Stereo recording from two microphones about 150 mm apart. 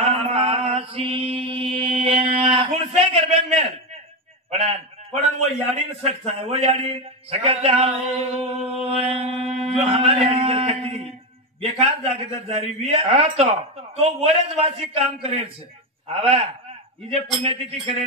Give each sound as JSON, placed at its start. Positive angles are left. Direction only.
{"t": 0.0, "sound": "mantra", "side_deg": -45}
{"t": 4.5, "sound": "a man's voice", "side_deg": -45}
{"t": 5.8, "sound": "a man's voice", "side_deg": -45}